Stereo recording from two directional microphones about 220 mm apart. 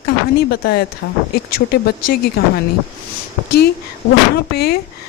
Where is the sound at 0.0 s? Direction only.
45° left (ahead or behind).